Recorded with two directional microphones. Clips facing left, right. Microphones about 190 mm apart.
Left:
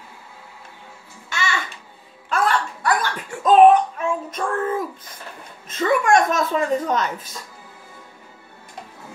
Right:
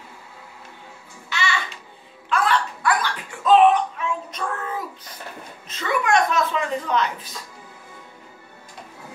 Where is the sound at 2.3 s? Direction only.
45° left (ahead or behind).